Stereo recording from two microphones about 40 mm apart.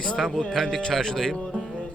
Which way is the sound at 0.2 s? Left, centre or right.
Centre.